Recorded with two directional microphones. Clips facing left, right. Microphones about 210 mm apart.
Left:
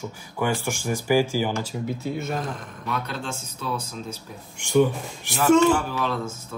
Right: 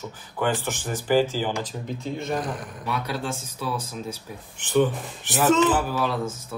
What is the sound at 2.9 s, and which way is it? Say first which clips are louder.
Speech: right 1 dB; 10° right (ahead or behind).